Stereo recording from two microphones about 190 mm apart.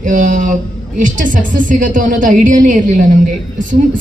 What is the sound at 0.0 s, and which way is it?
A woman's voice, 45° right (ahead or behind).